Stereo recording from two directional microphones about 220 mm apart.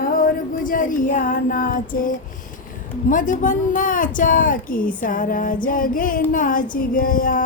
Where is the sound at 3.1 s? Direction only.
35° left (ahead or behind).